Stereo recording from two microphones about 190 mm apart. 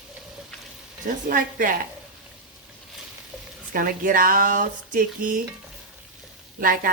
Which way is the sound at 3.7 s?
45° right (ahead or behind).